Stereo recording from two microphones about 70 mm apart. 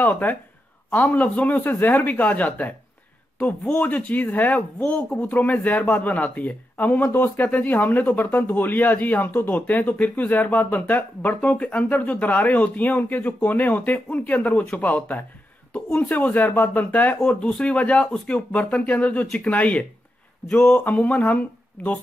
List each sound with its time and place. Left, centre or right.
0.0 s speech: left
17.2 s speech: centre
20.7 s speech: left